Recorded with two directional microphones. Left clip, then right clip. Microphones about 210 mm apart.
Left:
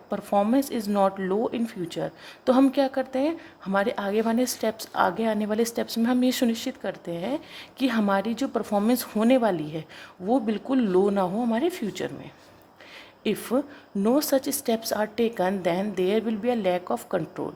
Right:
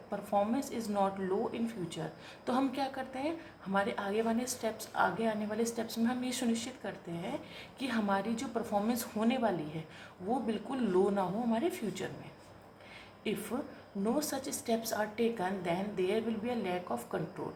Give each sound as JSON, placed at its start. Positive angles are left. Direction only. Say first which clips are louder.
{"t": 0.1, "sound": "speech", "louder": "left 9 dB", "side_deg": 40}
{"t": 13.2, "sound": "speech", "louder": "left 11 dB", "side_deg": 40}